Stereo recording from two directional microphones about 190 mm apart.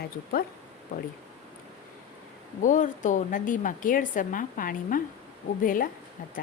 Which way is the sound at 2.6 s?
40° left (ahead or behind).